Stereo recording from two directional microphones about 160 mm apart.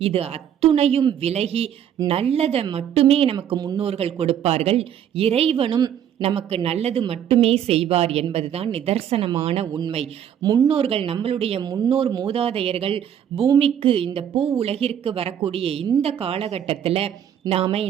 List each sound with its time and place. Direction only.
0.0 s speech: 40° right (ahead or behind)
3.3 s speech: 25° right (ahead or behind)
3.8 s speech: 40° right (ahead or behind)
10.7 s speech: 35° right (ahead or behind)
11.6 s speech: 25° right (ahead or behind)
11.9 s speech: 35° right (ahead or behind)